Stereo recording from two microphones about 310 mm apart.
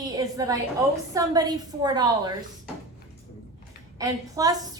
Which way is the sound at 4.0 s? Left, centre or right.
Centre.